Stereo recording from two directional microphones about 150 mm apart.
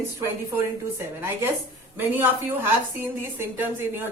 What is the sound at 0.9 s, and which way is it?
A woman's voice, 15° right (ahead or behind).